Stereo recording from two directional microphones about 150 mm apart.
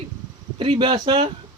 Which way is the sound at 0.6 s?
35° right (ahead or behind).